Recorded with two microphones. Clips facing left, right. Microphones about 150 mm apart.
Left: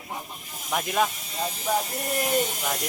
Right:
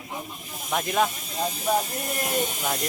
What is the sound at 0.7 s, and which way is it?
Speech, centre (ahead or behind).